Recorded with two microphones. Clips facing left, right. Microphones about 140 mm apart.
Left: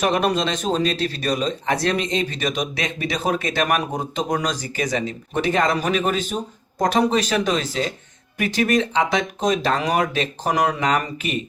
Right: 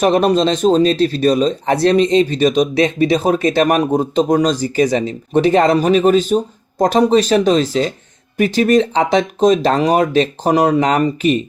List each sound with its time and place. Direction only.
0.0 s speech: 30° right (ahead or behind)